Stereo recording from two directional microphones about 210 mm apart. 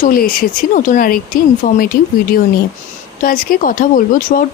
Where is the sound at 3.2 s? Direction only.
40° left (ahead or behind).